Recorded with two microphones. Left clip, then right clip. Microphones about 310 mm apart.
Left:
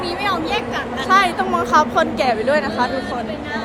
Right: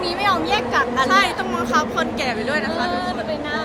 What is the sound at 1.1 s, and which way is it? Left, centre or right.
Speech, centre.